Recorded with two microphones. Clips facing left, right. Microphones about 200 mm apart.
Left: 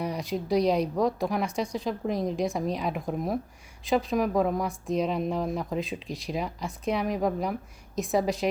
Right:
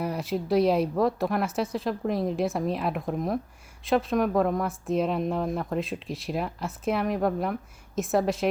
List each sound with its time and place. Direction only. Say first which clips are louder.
0.0 s speech: right 1 dB; 5° right (ahead or behind)